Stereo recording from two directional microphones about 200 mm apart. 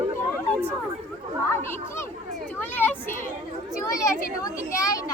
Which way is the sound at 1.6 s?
10° left (ahead or behind).